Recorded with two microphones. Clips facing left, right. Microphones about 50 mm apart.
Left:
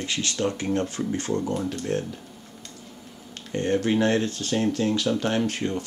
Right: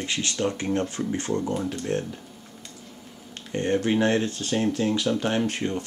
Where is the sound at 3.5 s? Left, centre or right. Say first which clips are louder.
Even; right.